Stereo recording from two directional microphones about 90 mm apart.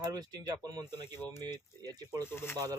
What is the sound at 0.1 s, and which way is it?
A man's voice, 45° right (ahead or behind).